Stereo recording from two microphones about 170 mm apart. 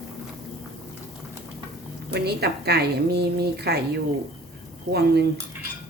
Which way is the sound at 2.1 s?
70° right (ahead or behind).